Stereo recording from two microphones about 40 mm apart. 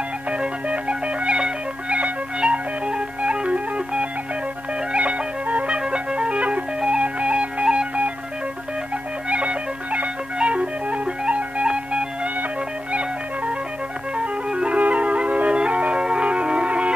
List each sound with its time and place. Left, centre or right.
0.3 s music: right
9.3 s music: right
14.1 s music: right